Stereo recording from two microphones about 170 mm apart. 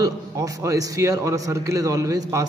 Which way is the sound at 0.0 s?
20° right (ahead or behind).